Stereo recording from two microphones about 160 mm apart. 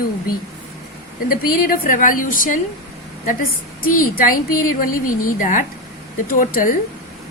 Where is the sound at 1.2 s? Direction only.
65° left (ahead or behind).